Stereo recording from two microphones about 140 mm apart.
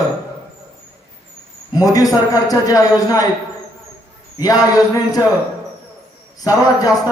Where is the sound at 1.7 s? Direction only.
25° left (ahead or behind).